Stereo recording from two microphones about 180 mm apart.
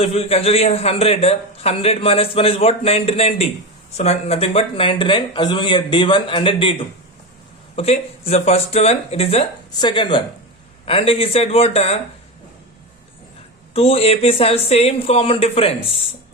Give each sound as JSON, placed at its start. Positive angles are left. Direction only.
{"t": 0.0, "sound": "a man's voice", "side_deg": 35}
{"t": 7.8, "sound": "a man's voice", "side_deg": 35}
{"t": 13.7, "sound": "a man's voice", "side_deg": 35}